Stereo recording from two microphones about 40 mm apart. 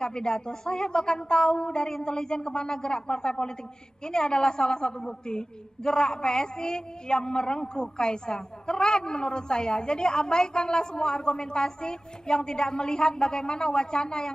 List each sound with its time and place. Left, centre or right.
0.0 s a woman's voice: centre